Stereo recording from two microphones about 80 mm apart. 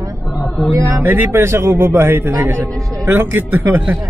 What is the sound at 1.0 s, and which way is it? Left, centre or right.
A man's voice, right.